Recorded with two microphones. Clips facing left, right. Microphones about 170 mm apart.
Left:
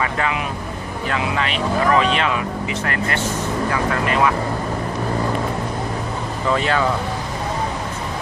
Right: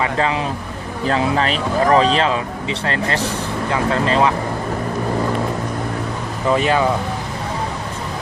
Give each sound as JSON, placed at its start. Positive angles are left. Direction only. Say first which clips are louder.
{"t": 0.0, "sound": "speech", "louder": "right 3 dB", "side_deg": -30}
{"t": 6.5, "sound": "speech", "louder": "right 3 dB", "side_deg": -15}